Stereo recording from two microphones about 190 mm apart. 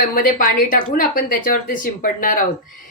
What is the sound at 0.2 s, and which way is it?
Speech, 45° left (ahead or behind).